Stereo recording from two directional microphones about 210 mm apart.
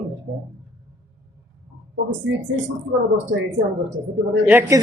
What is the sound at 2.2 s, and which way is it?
Speech, 65° right (ahead or behind).